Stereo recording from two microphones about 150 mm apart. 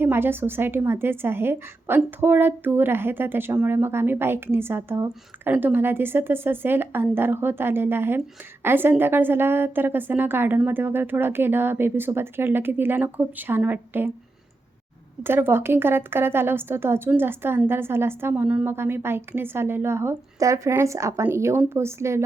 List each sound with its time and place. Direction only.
0.0 s a woman's voice: 15° right (ahead or behind)
15.2 s a woman's voice: 15° right (ahead or behind)